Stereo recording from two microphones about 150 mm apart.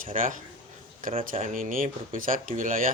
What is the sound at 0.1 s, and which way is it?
Speech, 60° right (ahead or behind).